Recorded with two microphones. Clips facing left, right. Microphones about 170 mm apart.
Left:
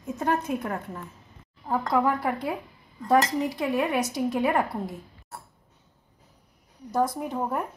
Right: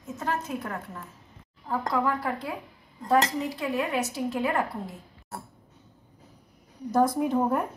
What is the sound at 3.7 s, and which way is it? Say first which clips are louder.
Speech: left 2 dB; 15° left (ahead or behind).